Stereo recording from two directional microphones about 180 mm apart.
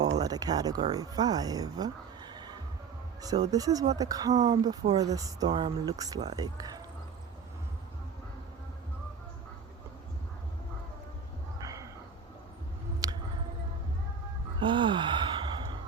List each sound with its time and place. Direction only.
0.2 s speech: 20° right (ahead or behind)
13.0 s a sound: 20° right (ahead or behind)
14.6 s gasp: 25° right (ahead or behind)